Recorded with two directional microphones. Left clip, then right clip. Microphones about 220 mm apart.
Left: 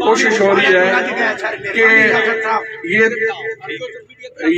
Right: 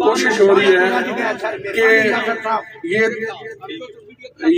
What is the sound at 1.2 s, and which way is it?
Speech, 20° left (ahead or behind).